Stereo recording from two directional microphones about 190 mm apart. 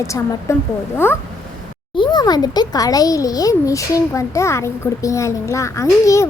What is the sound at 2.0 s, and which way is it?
A child's voice, 20° left (ahead or behind).